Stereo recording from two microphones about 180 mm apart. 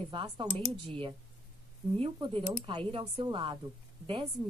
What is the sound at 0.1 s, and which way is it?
A woman's voice, 25° right (ahead or behind).